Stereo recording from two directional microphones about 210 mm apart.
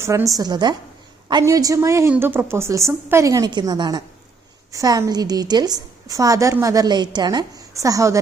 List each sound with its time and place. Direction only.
0.0 s a woman's voice: 15° right (ahead or behind)